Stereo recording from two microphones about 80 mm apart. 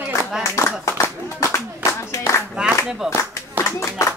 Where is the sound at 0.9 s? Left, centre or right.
Left.